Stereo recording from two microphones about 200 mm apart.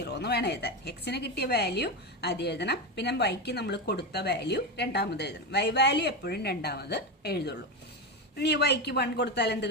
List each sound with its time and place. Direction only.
0.0 s a woman's voice: 55° left (ahead or behind)